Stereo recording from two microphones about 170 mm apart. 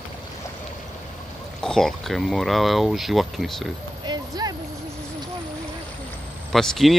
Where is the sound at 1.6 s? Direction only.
5° left (ahead or behind).